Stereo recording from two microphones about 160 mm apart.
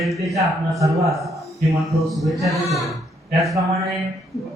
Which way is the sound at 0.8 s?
20° right (ahead or behind).